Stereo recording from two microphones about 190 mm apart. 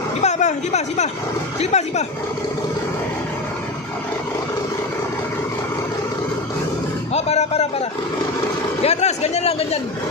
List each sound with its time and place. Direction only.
0.2 s speech: 40° left (ahead or behind)
7.2 s a sound: 35° left (ahead or behind)
8.8 s speech: 35° left (ahead or behind)